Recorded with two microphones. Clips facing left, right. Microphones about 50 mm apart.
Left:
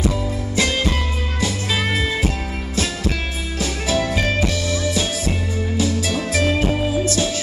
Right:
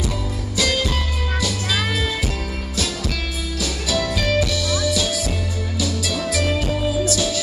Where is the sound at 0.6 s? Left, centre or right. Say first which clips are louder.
Left 1 dB; left.